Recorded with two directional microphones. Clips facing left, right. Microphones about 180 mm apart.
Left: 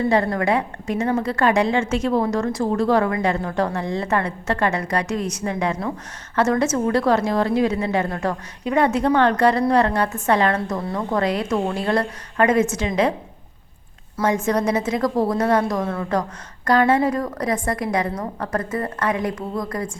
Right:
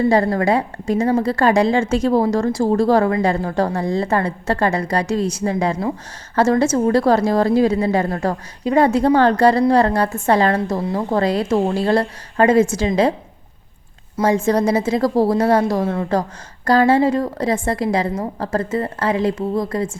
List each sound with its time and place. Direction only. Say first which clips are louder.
0.1 s a woman's voice: right 3 dB; 35° right (ahead or behind)
14.2 s a woman's voice: right 4 dB; 30° right (ahead or behind)